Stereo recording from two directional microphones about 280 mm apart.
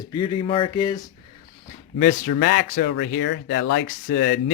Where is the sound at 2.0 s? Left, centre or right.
Left.